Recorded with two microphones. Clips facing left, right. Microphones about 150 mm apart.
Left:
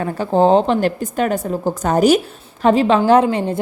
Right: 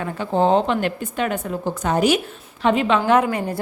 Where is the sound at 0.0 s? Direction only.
35° left (ahead or behind).